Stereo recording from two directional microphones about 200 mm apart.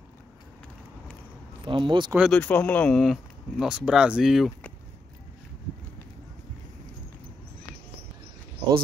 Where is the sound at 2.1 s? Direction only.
Centre (ahead or behind).